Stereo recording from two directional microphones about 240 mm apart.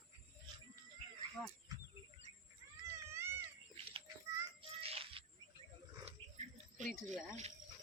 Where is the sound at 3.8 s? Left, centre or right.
Right.